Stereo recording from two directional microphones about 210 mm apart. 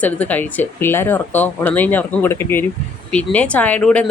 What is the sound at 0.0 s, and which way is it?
Speech, 5° left (ahead or behind).